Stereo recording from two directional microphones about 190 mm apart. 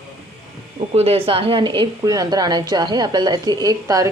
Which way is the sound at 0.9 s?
30° right (ahead or behind).